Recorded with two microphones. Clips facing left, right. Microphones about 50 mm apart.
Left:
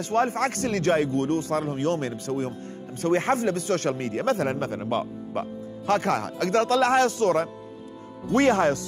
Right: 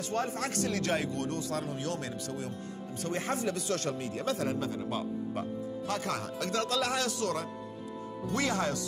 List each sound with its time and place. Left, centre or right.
0.0 s a man's voice: left